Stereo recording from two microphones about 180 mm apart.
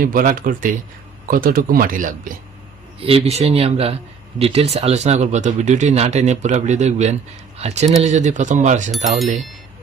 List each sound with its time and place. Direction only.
0.0 s a man's voice: 50° right (ahead or behind)
3.0 s speech: 30° right (ahead or behind)
9.0 s speech: centre (ahead or behind)